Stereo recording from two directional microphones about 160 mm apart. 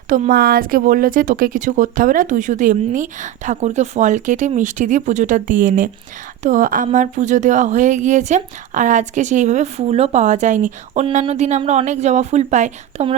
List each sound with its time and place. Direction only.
0.1 s speech: 60° right (ahead or behind)